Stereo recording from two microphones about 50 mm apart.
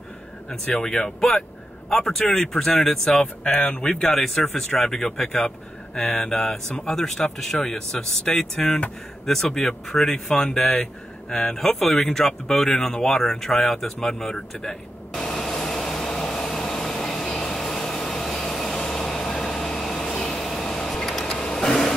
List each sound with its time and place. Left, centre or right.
0.5 s speech: left
0.8 s speech: centre
4.1 s speech: centre
13.9 s a sound: centre